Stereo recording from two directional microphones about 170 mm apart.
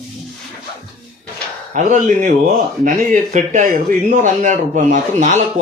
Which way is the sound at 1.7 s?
45° right (ahead or behind).